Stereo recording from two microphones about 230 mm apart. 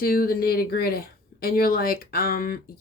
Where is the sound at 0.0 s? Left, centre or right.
Left.